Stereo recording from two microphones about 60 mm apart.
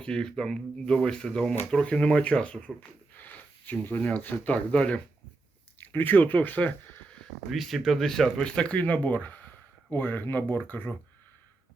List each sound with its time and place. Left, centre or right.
0.0 s speech: centre
3.2 s a sound: left
3.8 s speech: left
5.9 s speech: left
7.5 s speech: centre
8.4 s speech: centre